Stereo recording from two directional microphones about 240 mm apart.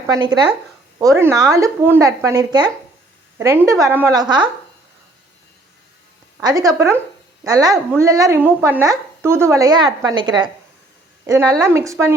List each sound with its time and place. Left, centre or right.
0.1 s speech: centre
6.4 s a woman's voice: centre